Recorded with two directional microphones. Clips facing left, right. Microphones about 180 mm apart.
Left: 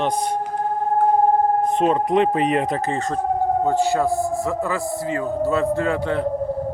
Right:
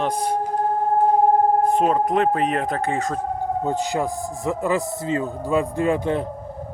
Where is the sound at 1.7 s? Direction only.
5° right (ahead or behind).